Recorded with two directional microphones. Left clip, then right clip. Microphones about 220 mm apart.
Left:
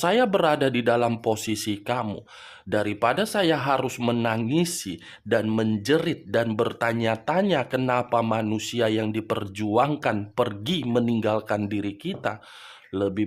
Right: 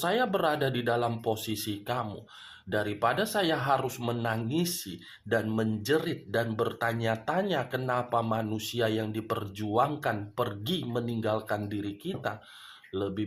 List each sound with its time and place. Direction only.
0.0 s speech: 40° left (ahead or behind)